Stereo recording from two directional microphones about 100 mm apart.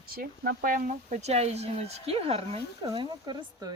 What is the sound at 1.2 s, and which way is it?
Speech, 90° right.